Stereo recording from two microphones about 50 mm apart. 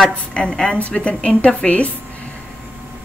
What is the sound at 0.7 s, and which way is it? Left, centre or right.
Speech, left.